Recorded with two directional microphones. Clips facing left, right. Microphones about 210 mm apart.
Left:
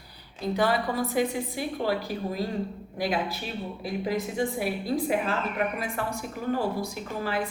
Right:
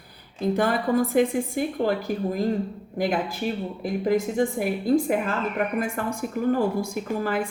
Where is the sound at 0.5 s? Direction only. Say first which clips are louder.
Right 3 dB; 50° right (ahead or behind).